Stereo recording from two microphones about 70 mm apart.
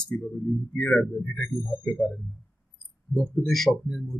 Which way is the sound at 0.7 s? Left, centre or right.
Centre.